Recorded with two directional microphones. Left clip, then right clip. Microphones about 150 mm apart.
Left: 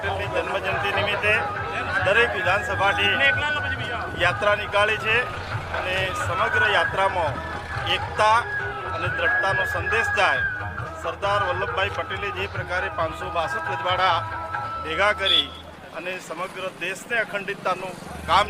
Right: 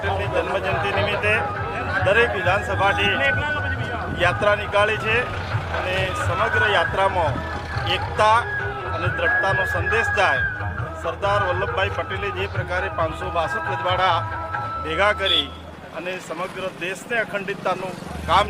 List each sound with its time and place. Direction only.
0.0 s speech: 10° right (ahead or behind)
11.0 s a man's voice: 5° right (ahead or behind)